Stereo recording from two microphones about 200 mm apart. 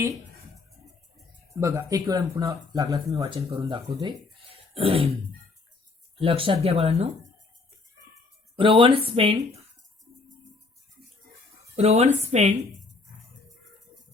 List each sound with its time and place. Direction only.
1.6 s speech: 15° right (ahead or behind)
4.7 s throat clearing: 30° right (ahead or behind)
6.1 s speech: 25° right (ahead or behind)
8.5 s speech: 25° right (ahead or behind)
11.8 s speech: 30° right (ahead or behind)